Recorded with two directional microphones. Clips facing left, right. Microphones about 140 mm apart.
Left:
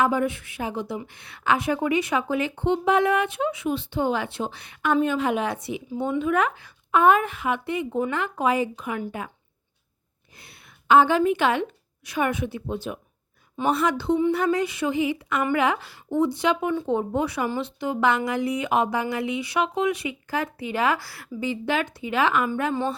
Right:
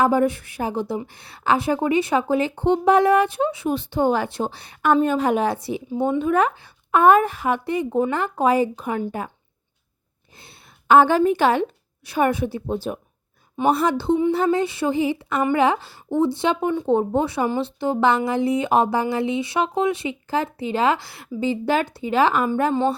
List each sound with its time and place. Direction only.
0.0 s a woman's voice: 35° right (ahead or behind)
6.9 s a woman's voice: 45° right (ahead or behind)
10.3 s a sound: 30° right (ahead or behind)
10.8 s a woman's voice: 45° right (ahead or behind); by 22.8 s 30° right (ahead or behind)